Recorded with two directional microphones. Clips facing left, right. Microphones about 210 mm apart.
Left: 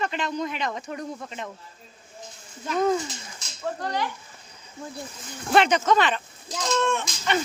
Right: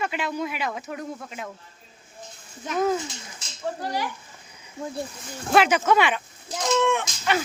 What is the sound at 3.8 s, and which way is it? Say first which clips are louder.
Speech: left 1 dB; 10° right (ahead or behind).